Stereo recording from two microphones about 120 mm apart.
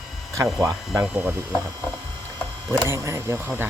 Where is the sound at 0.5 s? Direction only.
25° right (ahead or behind).